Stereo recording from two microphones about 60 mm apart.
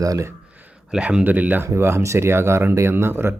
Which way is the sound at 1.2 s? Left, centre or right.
Right.